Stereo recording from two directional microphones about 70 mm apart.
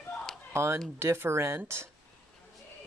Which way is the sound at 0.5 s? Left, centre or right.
Right.